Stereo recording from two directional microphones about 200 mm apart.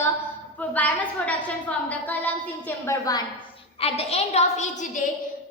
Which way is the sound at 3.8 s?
30° left (ahead or behind).